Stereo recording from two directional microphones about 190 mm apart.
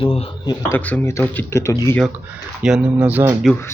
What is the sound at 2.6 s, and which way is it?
Speech, 5° right (ahead or behind).